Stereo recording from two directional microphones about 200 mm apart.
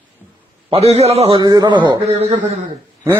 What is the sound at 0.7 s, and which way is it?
A man's voice, 30° right (ahead or behind).